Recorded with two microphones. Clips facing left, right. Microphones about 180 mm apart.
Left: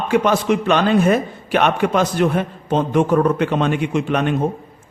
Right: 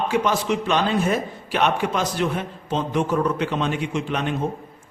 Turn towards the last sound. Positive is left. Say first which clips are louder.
# left 6 dB
turn(degrees=55)  # may be behind; listen again after turning